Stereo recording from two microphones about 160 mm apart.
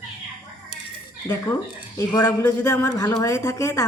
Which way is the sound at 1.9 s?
20° left (ahead or behind).